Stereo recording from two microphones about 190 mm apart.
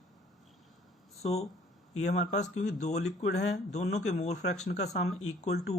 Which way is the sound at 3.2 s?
60° left (ahead or behind).